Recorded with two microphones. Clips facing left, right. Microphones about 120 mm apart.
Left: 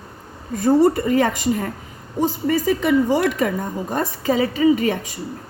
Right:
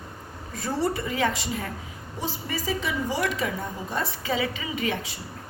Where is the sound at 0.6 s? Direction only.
45° left (ahead or behind).